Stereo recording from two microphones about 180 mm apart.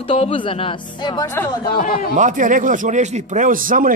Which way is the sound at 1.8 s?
50° left (ahead or behind).